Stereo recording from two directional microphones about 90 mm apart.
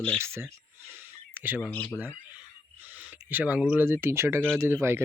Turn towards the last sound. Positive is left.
turn(degrees=-25)  # may be behind; listen again after turning